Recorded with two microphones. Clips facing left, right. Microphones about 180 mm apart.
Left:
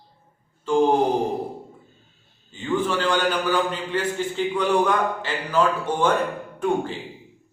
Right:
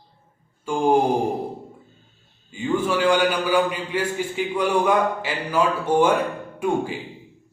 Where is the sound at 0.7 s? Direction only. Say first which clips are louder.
Left 6 dB; 10° right (ahead or behind).